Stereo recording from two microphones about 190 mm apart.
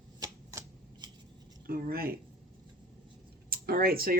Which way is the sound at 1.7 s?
50° right (ahead or behind).